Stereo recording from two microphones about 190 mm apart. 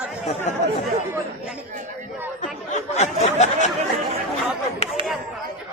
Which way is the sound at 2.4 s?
35° left (ahead or behind).